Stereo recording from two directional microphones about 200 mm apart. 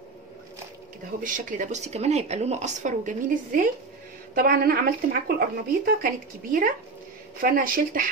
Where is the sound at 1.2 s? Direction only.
40° right (ahead or behind).